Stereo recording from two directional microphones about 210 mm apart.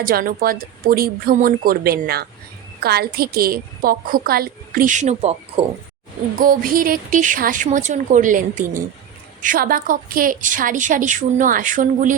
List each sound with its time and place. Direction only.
0.0 s a woman's voice: 45° right (ahead or behind)
6.4 s a woman's voice: 40° right (ahead or behind)